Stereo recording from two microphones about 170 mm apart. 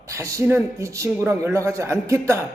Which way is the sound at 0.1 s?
15° right (ahead or behind).